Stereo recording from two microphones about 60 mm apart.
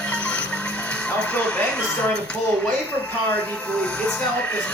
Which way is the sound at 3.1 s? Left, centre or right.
Left.